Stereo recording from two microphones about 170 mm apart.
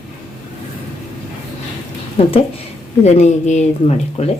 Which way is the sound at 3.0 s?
40° left (ahead or behind).